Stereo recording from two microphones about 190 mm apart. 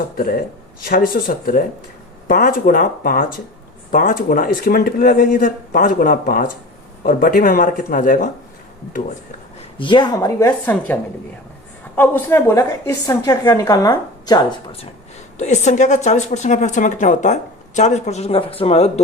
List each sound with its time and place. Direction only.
0.2 s speech: 50° left (ahead or behind)
9.7 s a woman's voice: 25° left (ahead or behind)
11.9 s a woman's voice: 10° left (ahead or behind)
15.4 s speech: 40° left (ahead or behind)